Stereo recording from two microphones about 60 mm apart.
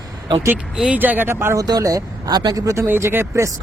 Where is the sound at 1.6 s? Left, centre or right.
Right.